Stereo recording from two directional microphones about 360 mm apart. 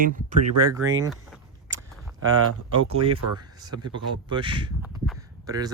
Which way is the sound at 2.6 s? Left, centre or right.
Centre.